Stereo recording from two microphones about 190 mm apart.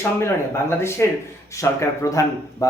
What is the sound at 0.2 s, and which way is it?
A man's voice, 15° left (ahead or behind).